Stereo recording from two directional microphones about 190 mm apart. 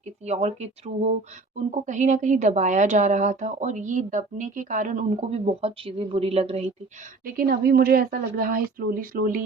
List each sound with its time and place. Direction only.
0.0 s speech: 35° right (ahead or behind)
7.3 s speech: 50° right (ahead or behind)